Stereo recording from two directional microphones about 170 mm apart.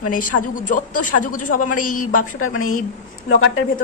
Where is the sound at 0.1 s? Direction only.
50° left (ahead or behind).